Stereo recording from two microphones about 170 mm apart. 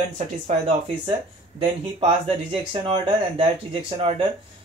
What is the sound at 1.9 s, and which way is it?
Speech, 35° right (ahead or behind).